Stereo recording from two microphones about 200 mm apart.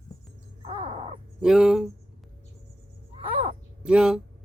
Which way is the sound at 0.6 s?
25° right (ahead or behind).